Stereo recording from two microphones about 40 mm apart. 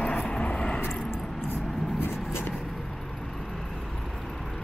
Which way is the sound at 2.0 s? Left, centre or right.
Left.